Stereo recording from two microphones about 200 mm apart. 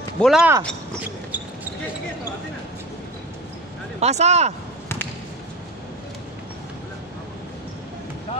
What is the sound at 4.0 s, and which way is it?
Speech, 35° right (ahead or behind).